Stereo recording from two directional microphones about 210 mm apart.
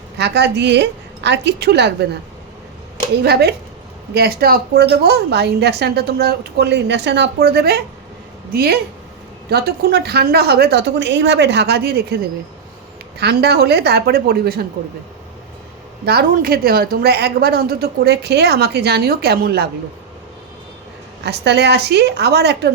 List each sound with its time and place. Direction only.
0.2 s a woman's voice: 55° right (ahead or behind)
3.2 s a woman's voice: 50° right (ahead or behind)
16.0 s a woman's voice: 45° right (ahead or behind)
21.2 s a woman's voice: 55° right (ahead or behind)